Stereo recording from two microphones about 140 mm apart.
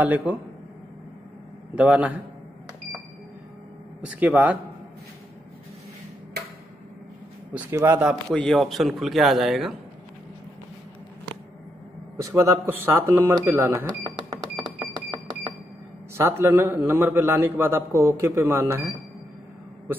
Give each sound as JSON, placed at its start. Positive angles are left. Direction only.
{"t": 0.0, "sound": "a man's voice", "side_deg": -10}
{"t": 1.8, "sound": "a man's voice", "side_deg": -10}
{"t": 4.0, "sound": "a man's voice", "side_deg": -10}
{"t": 7.5, "sound": "a man's voice", "side_deg": -15}
{"t": 8.0, "sound": "a man's voice", "side_deg": -5}
{"t": 12.2, "sound": "a man's voice", "side_deg": -20}
{"t": 13.8, "sound": "cash register", "side_deg": -30}
{"t": 15.0, "sound": "music", "side_deg": -30}
{"t": 16.2, "sound": "a man's voice", "side_deg": -15}